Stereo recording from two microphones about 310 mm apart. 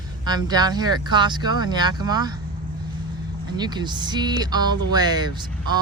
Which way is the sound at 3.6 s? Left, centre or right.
Centre.